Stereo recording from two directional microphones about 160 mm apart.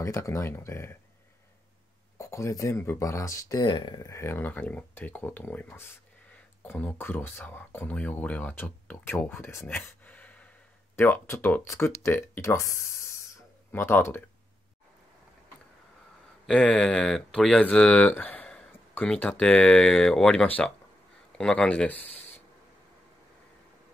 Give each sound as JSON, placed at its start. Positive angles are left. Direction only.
{"t": 0.0, "sound": "speech", "side_deg": 20}
{"t": 2.1, "sound": "speech", "side_deg": 20}
{"t": 16.4, "sound": "speech", "side_deg": 5}
{"t": 22.0, "sound": "a sound", "side_deg": 40}